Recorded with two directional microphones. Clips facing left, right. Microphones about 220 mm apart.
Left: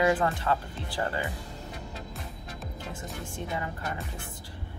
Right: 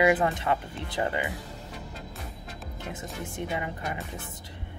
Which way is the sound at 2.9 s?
15° right (ahead or behind).